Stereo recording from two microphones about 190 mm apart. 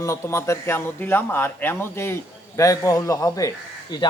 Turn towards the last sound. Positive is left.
turn(degrees=20)  # may be behind; listen again after turning